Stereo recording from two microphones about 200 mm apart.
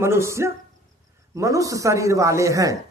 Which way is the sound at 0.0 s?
15° right (ahead or behind).